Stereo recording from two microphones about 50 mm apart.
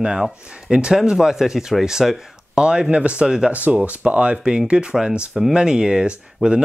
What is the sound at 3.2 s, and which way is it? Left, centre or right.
Speech, centre.